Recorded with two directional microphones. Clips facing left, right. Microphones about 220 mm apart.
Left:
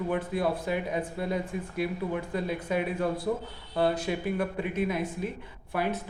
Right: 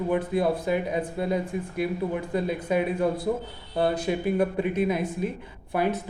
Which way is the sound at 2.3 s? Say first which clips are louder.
Right 6 dB; 15° right (ahead or behind).